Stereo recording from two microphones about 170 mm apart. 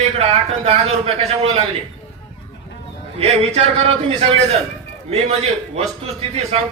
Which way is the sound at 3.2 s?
40° right (ahead or behind).